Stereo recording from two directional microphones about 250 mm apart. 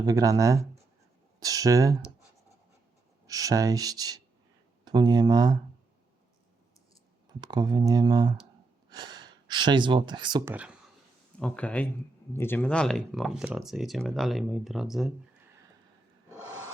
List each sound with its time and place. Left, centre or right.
0.0 s speech: centre
3.2 s speech: centre
7.3 s speech: centre
10.5 s speech: centre